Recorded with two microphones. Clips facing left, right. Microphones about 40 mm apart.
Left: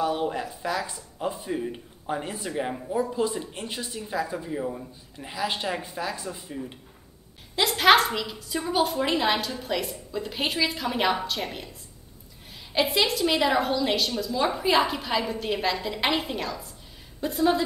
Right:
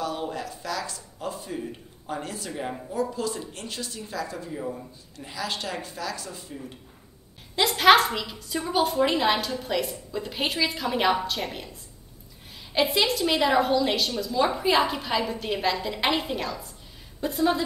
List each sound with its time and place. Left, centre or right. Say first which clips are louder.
0.0 s speech: left 4 dB; centre
7.5 s a woman's voice: right 1 dB; centre
12.7 s a woman's voice: even; centre